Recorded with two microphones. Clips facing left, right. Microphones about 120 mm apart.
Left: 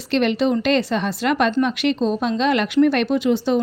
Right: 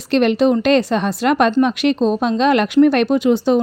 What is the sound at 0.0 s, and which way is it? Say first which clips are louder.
A woman's voice: right 4 dB; 45° right (ahead or behind).